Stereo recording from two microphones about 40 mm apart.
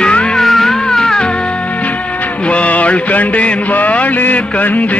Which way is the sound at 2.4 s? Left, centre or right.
Left.